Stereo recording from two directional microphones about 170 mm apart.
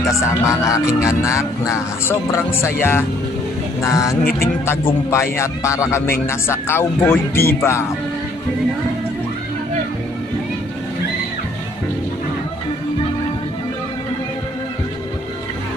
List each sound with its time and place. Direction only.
0.0 s speech: 15° left (ahead or behind)
4.2 s speech: 60° left (ahead or behind)
5.1 s speech: 15° left (ahead or behind)